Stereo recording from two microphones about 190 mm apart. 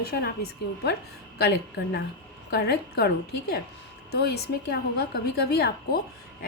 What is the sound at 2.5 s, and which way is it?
A woman's voice, 55° left (ahead or behind).